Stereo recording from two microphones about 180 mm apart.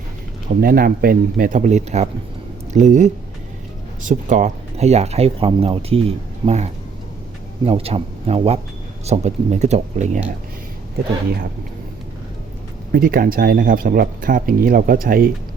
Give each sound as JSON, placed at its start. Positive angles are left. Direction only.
{"t": 0.6, "sound": "speech", "side_deg": -55}
{"t": 12.9, "sound": "speech", "side_deg": -55}